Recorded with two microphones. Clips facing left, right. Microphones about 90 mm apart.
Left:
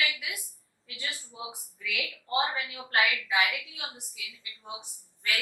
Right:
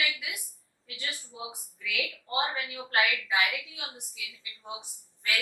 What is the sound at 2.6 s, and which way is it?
Speech, 25° left (ahead or behind).